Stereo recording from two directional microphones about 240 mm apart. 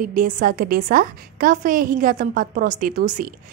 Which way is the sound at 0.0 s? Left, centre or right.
Right.